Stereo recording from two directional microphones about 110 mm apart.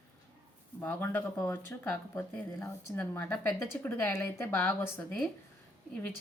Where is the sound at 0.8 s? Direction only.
15° left (ahead or behind).